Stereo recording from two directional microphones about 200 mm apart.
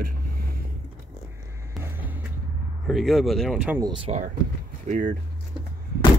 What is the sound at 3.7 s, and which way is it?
Speech, 20° right (ahead or behind).